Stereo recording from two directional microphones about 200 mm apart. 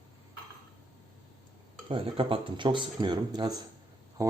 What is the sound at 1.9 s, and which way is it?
A man's voice, 25° right (ahead or behind).